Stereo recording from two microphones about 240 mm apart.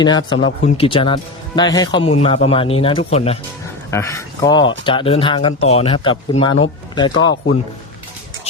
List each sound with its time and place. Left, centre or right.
0.0 s speech: centre
3.9 s speech: centre